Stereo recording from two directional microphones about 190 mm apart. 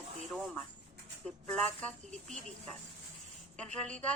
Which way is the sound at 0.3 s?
Centre (ahead or behind).